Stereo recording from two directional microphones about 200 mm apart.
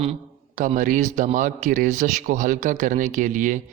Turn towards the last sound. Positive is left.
turn(degrees=-40)  # may be behind; listen again after turning